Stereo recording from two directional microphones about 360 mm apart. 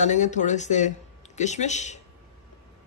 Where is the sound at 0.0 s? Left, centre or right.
Centre.